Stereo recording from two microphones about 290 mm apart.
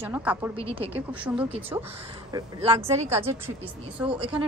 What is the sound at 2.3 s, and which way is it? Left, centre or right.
Speech, centre.